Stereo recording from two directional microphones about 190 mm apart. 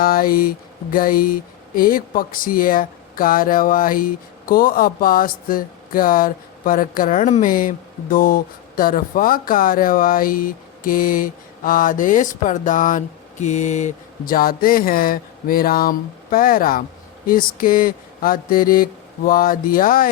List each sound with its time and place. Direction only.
0.0 s speech: 50° left (ahead or behind)